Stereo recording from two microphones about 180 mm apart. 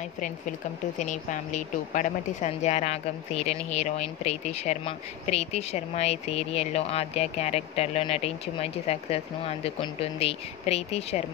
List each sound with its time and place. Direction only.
0.9 s speech: 45° left (ahead or behind)